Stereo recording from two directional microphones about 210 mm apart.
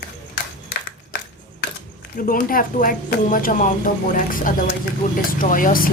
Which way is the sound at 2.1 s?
40° left (ahead or behind).